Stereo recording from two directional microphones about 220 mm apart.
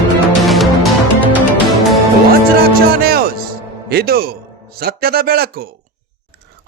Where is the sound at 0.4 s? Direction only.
Centre (ahead or behind).